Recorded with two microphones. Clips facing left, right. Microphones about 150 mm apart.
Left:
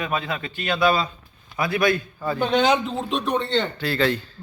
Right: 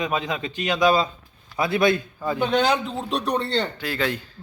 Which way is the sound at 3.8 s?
10° right (ahead or behind).